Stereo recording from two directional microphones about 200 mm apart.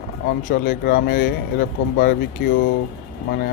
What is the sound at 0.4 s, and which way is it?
Speech, 45° left (ahead or behind).